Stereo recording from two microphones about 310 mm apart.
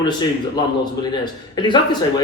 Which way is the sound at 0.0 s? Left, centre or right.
Centre.